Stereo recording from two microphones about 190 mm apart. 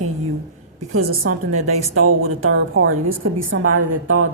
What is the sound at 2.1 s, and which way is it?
A woman's voice, 90° right.